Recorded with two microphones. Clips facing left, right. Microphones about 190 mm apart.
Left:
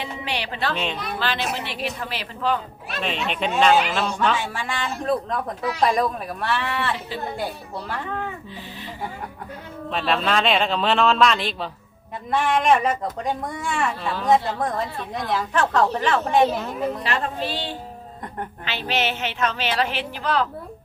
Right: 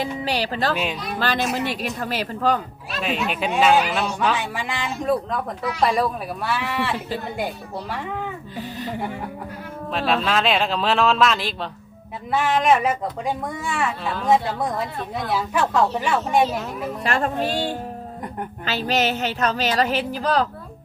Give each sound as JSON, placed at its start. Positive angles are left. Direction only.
{"t": 0.0, "sound": "music", "side_deg": -40}
{"t": 0.7, "sound": "a woman's voice", "side_deg": -5}
{"t": 1.2, "sound": "speech", "side_deg": -45}
{"t": 3.0, "sound": "speech", "side_deg": -5}
{"t": 4.5, "sound": "a woman's voice", "side_deg": -15}
{"t": 5.8, "sound": "a woman's voice", "side_deg": -5}
{"t": 8.5, "sound": "speech", "side_deg": -40}
{"t": 9.9, "sound": "a woman's voice", "side_deg": 0}
{"t": 17.0, "sound": "speech", "side_deg": -45}